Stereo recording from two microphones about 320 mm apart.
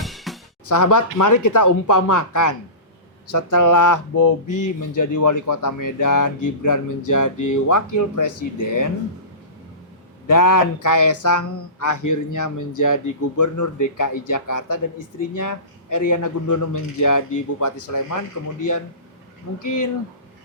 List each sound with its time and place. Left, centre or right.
0.0 s music: centre
0.7 s speech: left
10.2 s a man's voice: left
19.6 s speech: left